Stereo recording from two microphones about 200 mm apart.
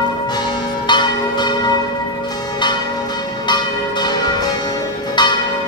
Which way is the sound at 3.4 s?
20° left (ahead or behind).